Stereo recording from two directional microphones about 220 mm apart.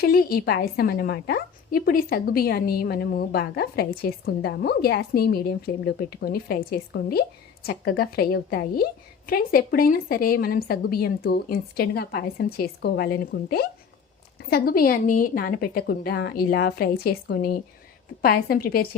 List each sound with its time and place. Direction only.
0.0 s a woman's voice: 40° left (ahead or behind)